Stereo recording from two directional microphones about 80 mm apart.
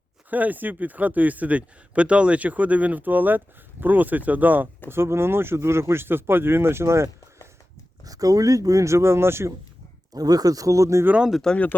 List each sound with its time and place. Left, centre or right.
0.3 s speech: right
8.0 s speech: right
10.2 s speech: right
11.2 s speech: centre
11.4 s speech: centre